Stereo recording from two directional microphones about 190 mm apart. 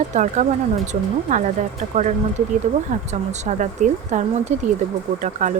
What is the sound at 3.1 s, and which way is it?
Speech, 35° right (ahead or behind).